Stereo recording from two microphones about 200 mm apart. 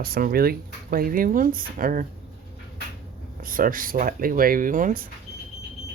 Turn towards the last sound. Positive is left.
turn(degrees=-40)  # may be behind; listen again after turning